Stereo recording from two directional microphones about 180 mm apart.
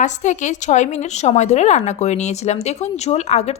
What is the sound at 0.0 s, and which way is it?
A woman's voice, 40° left (ahead or behind).